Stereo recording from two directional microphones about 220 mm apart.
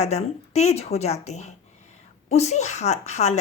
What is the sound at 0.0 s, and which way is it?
Speech, 30° left (ahead or behind).